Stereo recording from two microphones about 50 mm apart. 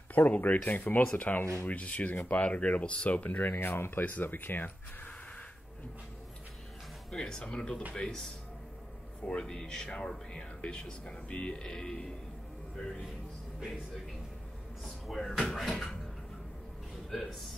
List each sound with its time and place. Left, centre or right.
0.1 s speech: left
7.1 s speech: centre
9.2 s speech: centre
15.0 s speech: centre
17.1 s speech: centre